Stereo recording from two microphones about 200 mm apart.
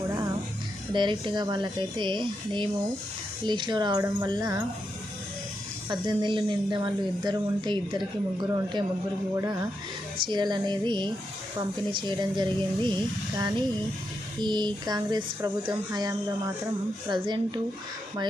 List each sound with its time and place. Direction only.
0.9 s speech: 25° right (ahead or behind)
5.9 s speech: 25° right (ahead or behind)
14.3 s speech: 20° right (ahead or behind)